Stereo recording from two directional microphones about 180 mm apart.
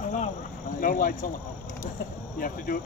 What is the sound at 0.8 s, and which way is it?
Speech, 50° left (ahead or behind).